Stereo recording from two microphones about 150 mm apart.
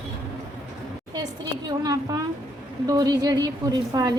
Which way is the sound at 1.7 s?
25° right (ahead or behind).